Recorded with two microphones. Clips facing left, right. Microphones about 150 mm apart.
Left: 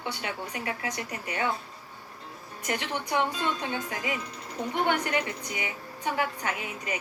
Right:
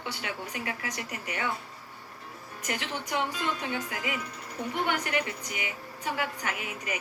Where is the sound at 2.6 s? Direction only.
25° left (ahead or behind).